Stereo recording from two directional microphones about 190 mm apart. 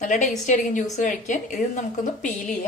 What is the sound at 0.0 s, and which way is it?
Speech, 40° left (ahead or behind).